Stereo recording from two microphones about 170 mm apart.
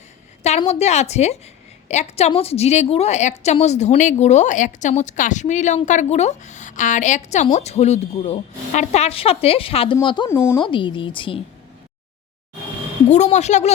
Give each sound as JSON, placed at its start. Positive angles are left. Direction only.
{"t": 0.6, "sound": "a woman's voice", "side_deg": 40}
{"t": 10.2, "sound": "speech", "side_deg": 15}
{"t": 10.6, "sound": "a woman's voice", "side_deg": 30}
{"t": 13.1, "sound": "a woman's voice", "side_deg": 45}